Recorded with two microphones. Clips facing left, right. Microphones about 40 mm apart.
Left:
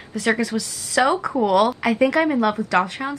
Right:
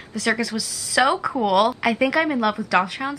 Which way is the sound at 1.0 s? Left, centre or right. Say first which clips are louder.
Even; right.